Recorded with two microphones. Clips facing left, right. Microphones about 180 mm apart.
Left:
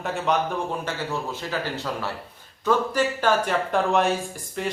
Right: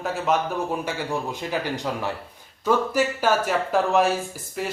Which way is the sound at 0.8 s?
15° right (ahead or behind).